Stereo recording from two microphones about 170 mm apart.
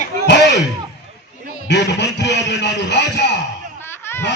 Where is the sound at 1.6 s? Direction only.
90° left.